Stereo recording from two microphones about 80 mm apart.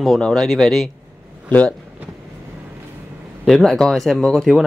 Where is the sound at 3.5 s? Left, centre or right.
Centre.